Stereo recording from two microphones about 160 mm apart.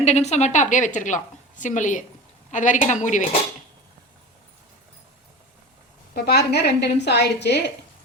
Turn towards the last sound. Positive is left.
turn(degrees=90)